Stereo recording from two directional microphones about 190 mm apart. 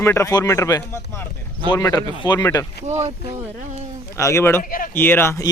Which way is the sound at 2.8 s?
35° right (ahead or behind).